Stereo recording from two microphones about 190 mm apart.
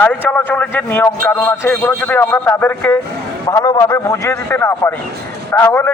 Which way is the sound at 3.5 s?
20° left (ahead or behind).